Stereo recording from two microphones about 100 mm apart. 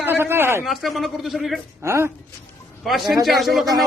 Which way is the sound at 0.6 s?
Centre (ahead or behind).